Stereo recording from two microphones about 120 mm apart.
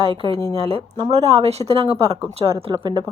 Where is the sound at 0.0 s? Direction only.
50° right (ahead or behind).